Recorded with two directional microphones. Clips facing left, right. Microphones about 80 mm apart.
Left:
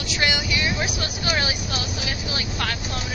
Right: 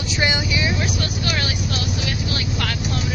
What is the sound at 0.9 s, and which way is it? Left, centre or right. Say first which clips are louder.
Vehicle: right 1 dB; centre.